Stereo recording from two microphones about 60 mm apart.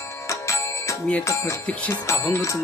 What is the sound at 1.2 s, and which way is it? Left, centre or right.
Speech, left.